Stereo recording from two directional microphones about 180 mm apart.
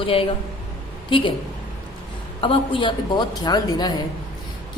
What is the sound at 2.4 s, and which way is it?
A woman's voice, 30° left (ahead or behind).